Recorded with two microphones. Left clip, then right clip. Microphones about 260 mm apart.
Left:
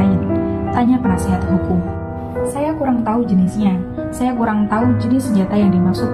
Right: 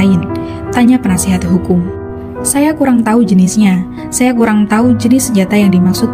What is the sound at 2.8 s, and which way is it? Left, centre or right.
A woman's voice, right.